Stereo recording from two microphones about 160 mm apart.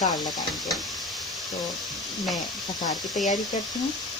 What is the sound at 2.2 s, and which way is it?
Speech, centre (ahead or behind).